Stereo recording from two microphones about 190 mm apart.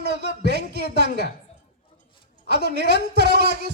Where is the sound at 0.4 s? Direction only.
60° right (ahead or behind).